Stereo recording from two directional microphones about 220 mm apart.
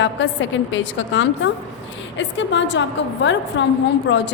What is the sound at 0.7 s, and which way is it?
A woman's voice, 60° left (ahead or behind).